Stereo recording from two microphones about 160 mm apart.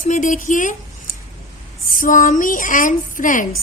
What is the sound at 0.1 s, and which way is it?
Speech, 50° left (ahead or behind).